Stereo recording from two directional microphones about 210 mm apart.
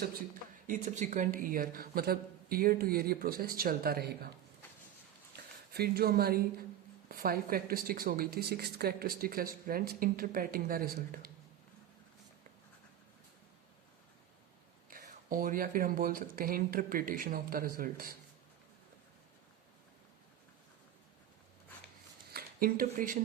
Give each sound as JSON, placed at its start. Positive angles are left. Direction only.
{"t": 0.7, "sound": "speech", "side_deg": -35}
{"t": 5.7, "sound": "speech", "side_deg": -45}
{"t": 14.8, "sound": "speech", "side_deg": -40}
{"t": 22.3, "sound": "a sound", "side_deg": -45}